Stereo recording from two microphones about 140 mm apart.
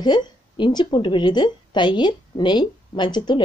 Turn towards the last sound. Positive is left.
turn(degrees=30)  # may be behind; listen again after turning